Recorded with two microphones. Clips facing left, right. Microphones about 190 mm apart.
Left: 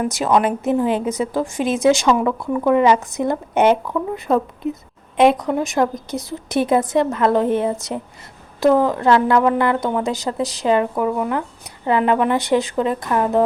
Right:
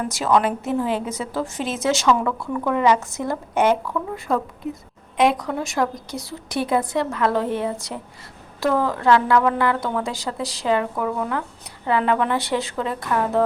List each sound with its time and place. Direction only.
0.0 s a woman's voice: 20° left (ahead or behind)